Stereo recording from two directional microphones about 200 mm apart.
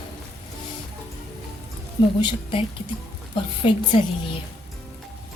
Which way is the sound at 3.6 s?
25° left (ahead or behind).